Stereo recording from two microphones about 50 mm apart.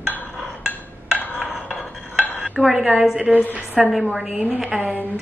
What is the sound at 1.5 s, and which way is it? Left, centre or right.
Dishes, centre.